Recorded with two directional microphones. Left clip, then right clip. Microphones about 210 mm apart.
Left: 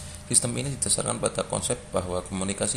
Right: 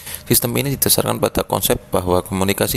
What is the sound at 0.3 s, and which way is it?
Speech, 45° right (ahead or behind).